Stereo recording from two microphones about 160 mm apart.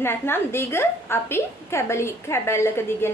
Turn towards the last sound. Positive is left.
turn(degrees=15)  # may be behind; listen again after turning